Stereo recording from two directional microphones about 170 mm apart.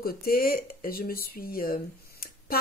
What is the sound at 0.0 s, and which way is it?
Speech, 60° left (ahead or behind).